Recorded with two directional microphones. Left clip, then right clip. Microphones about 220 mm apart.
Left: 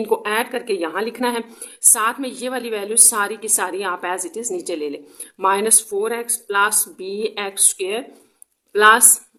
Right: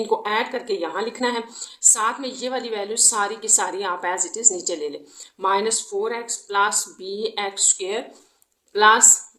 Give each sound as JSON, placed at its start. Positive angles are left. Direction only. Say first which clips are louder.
{"t": 0.1, "sound": "a woman's voice", "louder": "left 3 dB", "side_deg": 35}